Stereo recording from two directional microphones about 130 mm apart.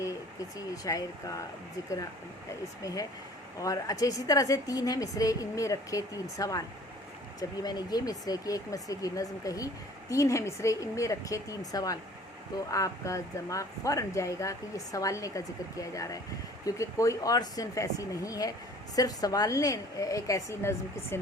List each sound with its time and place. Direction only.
0.0 s speech: 25° left (ahead or behind)
2.8 s a woman's voice: 25° left (ahead or behind)